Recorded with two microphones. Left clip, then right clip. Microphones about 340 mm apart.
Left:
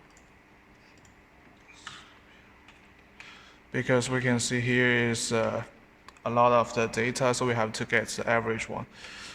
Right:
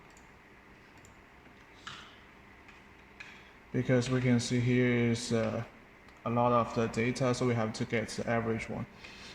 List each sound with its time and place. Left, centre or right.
3.7 s a man's voice: left